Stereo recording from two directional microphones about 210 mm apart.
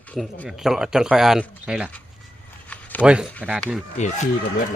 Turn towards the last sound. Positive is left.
turn(degrees=35)  # may be behind; listen again after turning